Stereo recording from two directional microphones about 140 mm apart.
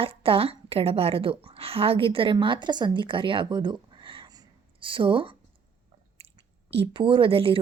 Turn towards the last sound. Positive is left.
turn(degrees=-40)  # may be behind; listen again after turning